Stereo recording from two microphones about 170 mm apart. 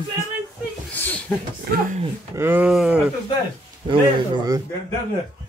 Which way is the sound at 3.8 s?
25° right (ahead or behind).